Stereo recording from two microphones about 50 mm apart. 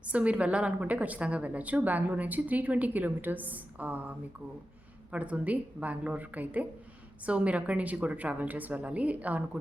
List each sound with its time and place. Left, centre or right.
0.0 s a woman's voice: right
5.1 s a woman's voice: right